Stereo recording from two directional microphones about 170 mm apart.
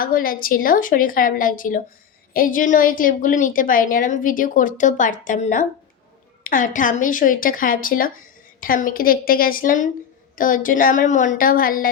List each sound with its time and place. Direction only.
0.0 s a woman's voice: 55° left (ahead or behind)